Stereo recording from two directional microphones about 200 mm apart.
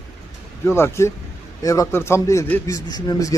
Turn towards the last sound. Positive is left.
turn(degrees=20)  # may be behind; listen again after turning